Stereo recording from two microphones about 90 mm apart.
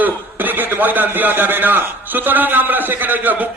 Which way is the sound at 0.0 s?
20° right (ahead or behind).